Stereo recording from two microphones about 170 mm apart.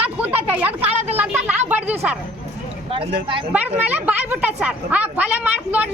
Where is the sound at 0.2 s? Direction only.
10° right (ahead or behind).